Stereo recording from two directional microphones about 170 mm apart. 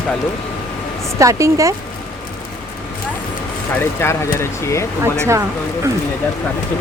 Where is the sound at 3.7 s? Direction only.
15° left (ahead or behind).